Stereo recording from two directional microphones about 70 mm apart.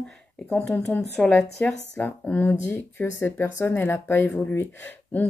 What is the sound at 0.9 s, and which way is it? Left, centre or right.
Speech, left.